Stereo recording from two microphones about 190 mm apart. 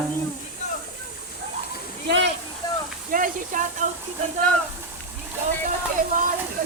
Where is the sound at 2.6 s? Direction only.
20° left (ahead or behind).